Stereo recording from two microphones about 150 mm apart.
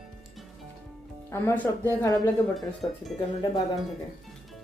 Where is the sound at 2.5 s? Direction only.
Centre (ahead or behind).